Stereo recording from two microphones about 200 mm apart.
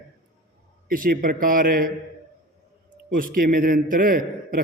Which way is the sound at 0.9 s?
45° right (ahead or behind).